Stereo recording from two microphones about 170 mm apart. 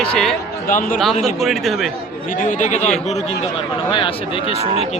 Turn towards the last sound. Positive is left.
turn(degrees=35)  # may be behind; listen again after turning